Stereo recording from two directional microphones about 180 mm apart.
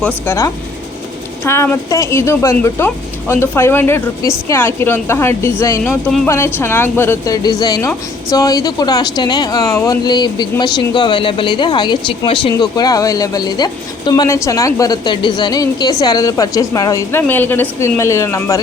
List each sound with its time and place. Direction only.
0.0 s a woman's voice: 10° left (ahead or behind)
5.9 s speech: centre (ahead or behind)
6.2 s a woman's voice: 15° left (ahead or behind)